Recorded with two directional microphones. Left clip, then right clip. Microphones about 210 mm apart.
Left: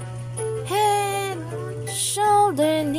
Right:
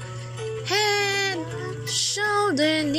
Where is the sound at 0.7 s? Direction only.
15° left (ahead or behind).